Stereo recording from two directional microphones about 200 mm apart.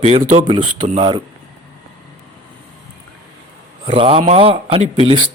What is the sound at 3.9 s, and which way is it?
Speech, 30° right (ahead or behind).